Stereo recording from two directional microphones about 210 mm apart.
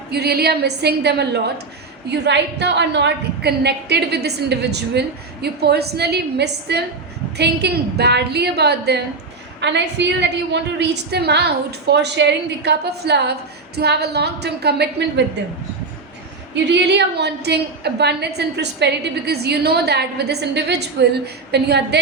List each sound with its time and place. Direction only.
0.1 s a woman's voice: 50° right (ahead or behind)
16.6 s a woman's voice: 55° right (ahead or behind)